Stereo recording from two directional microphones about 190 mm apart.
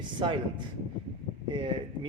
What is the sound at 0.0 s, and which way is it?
Speech, 25° right (ahead or behind).